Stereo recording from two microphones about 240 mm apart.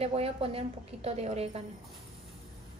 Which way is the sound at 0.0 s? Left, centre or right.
Right.